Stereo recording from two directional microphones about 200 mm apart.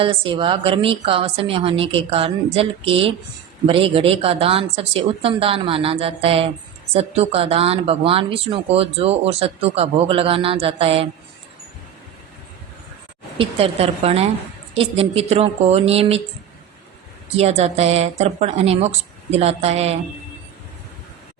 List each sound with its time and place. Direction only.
0.0 s a woman's voice: 25° right (ahead or behind)
13.4 s a woman's voice: 30° right (ahead or behind)
17.3 s a woman's voice: 30° right (ahead or behind)